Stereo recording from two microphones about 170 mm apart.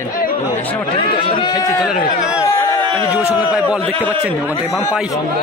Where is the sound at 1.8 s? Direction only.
5° right (ahead or behind).